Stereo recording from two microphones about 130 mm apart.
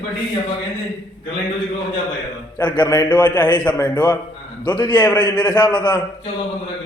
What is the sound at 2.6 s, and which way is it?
A man's voice, 35° left (ahead or behind).